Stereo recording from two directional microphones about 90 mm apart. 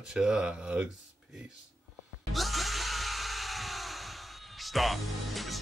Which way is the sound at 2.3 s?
Centre (ahead or behind).